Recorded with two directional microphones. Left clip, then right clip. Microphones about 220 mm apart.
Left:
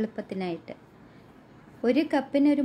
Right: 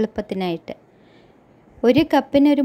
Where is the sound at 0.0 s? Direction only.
35° right (ahead or behind).